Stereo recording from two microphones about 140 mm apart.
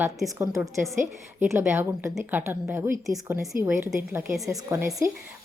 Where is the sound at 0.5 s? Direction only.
Centre (ahead or behind).